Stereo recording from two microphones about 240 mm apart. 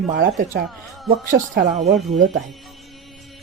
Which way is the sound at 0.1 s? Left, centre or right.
Right.